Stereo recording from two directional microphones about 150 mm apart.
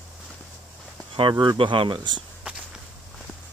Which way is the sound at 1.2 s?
30° right (ahead or behind).